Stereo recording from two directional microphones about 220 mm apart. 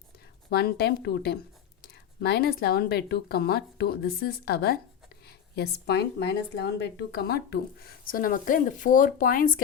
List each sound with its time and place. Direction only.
0.5 s a woman's voice: 45° left (ahead or behind)